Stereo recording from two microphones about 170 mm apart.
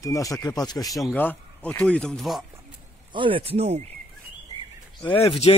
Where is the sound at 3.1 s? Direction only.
30° right (ahead or behind).